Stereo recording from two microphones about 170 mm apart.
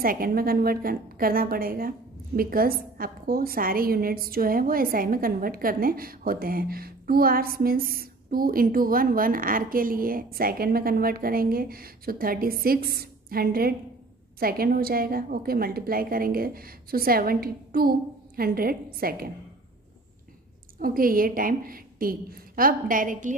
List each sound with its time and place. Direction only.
0.0 s a woman's voice: 60° right (ahead or behind)
20.8 s a woman's voice: 55° right (ahead or behind)